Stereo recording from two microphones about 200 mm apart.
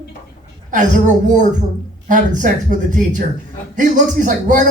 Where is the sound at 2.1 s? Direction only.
40° right (ahead or behind).